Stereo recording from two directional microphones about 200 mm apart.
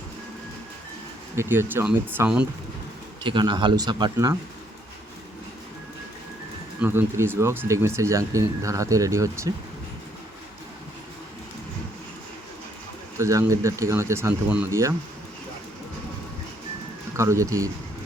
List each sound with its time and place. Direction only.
1.4 s speech: 10° right (ahead or behind)
3.2 s speech: 20° right (ahead or behind)
6.8 s speech: 10° right (ahead or behind)
13.1 s speech: 15° right (ahead or behind)
17.2 s speech: 15° right (ahead or behind)